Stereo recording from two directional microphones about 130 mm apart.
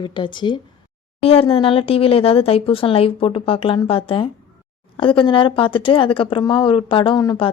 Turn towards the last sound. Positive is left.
turn(degrees=35)  # may be behind; listen again after turning